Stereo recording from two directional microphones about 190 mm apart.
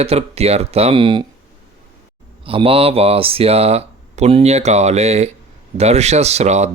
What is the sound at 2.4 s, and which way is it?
Mantra, 30° right (ahead or behind).